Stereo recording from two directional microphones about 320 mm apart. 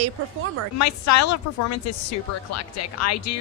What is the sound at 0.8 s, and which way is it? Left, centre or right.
A woman's voice, left.